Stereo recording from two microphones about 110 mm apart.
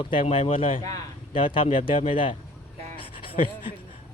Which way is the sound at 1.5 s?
50° left (ahead or behind).